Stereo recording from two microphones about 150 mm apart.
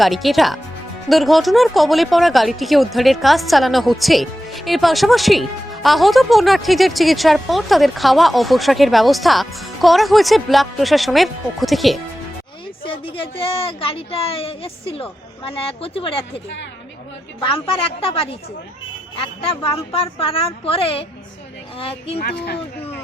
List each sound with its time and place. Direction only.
0.0 s speech: centre (ahead or behind)
12.8 s speech: 35° left (ahead or behind)
17.4 s speech: 35° left (ahead or behind)
22.2 s speech: 90° left